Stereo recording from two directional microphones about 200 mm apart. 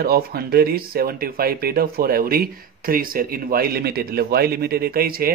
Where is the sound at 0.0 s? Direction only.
50° right (ahead or behind).